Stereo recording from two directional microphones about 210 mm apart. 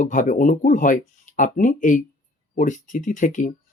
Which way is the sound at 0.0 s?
35° left (ahead or behind).